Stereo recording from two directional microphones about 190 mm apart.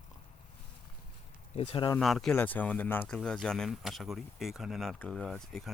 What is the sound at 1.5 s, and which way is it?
Speech, 30° left (ahead or behind).